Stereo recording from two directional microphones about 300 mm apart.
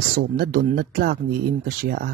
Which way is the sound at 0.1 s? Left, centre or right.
Right.